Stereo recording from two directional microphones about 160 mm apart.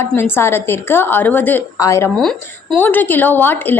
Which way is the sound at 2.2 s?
5° left (ahead or behind).